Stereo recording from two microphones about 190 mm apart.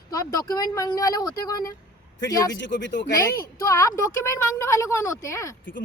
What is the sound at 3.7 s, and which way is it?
A woman's voice, 15° left (ahead or behind).